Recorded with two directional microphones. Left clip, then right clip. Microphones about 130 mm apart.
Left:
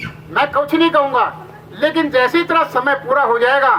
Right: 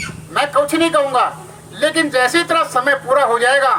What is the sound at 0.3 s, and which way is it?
A man's voice, 25° left (ahead or behind).